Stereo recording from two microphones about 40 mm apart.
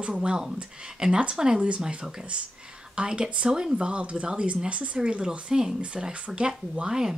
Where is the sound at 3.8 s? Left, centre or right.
Right.